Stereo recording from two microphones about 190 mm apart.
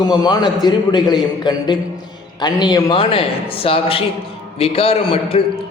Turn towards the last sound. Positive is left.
turn(degrees=30)  # may be behind; listen again after turning